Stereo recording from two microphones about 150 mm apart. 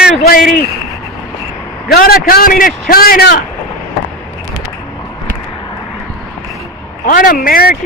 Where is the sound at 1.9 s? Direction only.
85° left.